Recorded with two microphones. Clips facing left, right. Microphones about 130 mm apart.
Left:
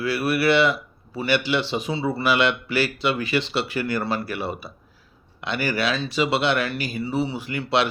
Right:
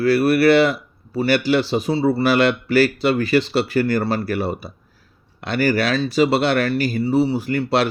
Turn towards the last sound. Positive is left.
turn(degrees=-40)  # may be behind; listen again after turning